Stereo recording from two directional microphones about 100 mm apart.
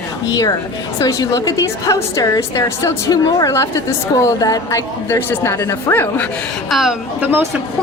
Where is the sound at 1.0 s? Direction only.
35° left (ahead or behind).